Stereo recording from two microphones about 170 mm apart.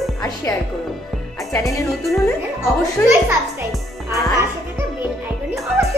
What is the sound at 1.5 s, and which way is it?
Speech, 20° left (ahead or behind).